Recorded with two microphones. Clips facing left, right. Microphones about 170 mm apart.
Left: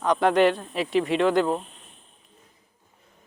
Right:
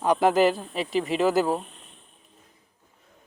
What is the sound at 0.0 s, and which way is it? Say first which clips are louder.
Speech: even; 5° right (ahead or behind).